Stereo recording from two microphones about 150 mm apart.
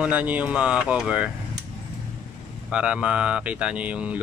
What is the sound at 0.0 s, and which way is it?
Speech, 10° right (ahead or behind).